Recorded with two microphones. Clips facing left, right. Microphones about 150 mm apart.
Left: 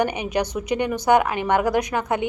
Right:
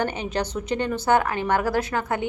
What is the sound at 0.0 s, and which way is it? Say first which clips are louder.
A woman's voice: left 3 dB; 15° left (ahead or behind).